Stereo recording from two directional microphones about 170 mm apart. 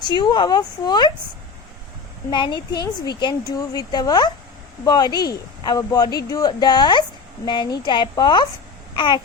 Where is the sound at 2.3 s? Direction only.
25° left (ahead or behind).